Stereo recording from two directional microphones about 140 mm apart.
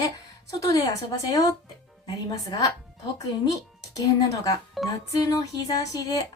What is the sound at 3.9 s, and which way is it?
A woman's voice, 25° left (ahead or behind).